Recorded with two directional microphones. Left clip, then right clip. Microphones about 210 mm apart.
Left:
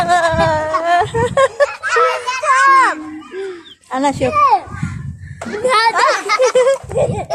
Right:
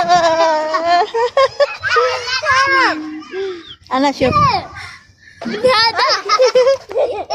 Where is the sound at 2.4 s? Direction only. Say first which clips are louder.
Left 3 dB; 60° left (ahead or behind).